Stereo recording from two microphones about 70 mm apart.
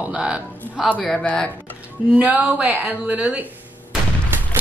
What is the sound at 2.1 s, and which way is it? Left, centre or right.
Speech, right.